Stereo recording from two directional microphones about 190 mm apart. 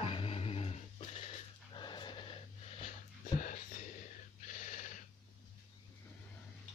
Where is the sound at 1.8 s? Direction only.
25° left (ahead or behind).